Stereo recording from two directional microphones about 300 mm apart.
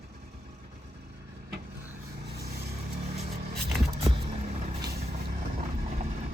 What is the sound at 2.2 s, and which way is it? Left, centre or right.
Vehicle, right.